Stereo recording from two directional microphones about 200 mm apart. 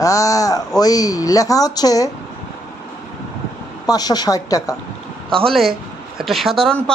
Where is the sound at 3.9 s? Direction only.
20° left (ahead or behind).